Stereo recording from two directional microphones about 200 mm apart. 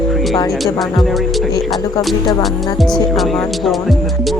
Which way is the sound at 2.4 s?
Centre (ahead or behind).